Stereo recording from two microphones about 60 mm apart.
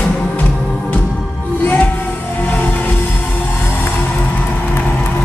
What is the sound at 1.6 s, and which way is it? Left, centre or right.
Music, left.